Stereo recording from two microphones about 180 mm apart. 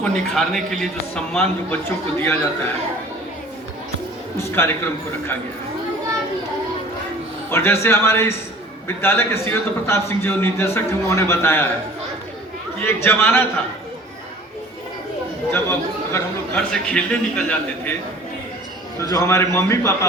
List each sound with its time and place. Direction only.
0.0 s a man's voice: centre (ahead or behind)
4.4 s a man's voice: 15° left (ahead or behind)
7.5 s a man's voice: 15° left (ahead or behind)
12.8 s a man's voice: 15° left (ahead or behind)
15.5 s a man's voice: 15° left (ahead or behind)
19.1 s a man's voice: 15° left (ahead or behind)